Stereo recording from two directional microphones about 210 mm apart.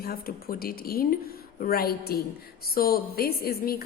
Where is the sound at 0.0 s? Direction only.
45° left (ahead or behind).